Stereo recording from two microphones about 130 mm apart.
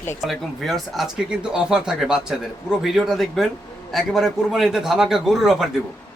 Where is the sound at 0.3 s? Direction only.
Centre (ahead or behind).